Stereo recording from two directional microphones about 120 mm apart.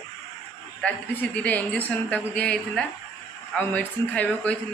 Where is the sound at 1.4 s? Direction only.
15° left (ahead or behind).